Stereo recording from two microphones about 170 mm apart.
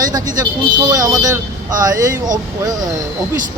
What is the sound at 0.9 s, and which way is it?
Speech, 20° right (ahead or behind).